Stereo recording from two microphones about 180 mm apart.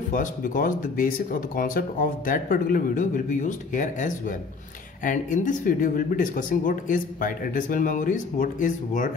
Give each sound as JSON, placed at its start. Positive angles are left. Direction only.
{"t": 0.1, "sound": "speech", "side_deg": 50}